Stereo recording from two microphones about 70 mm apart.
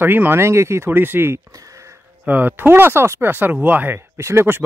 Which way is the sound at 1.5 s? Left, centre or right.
Right.